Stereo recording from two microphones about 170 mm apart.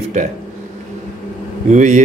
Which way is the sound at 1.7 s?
45° right (ahead or behind).